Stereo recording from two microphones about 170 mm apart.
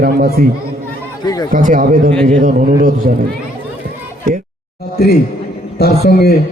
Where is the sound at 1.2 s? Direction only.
25° left (ahead or behind).